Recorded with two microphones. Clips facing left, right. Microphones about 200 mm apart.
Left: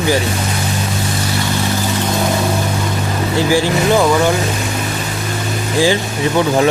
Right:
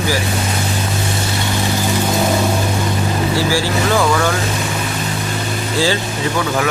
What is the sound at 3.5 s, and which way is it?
Speech, 20° left (ahead or behind).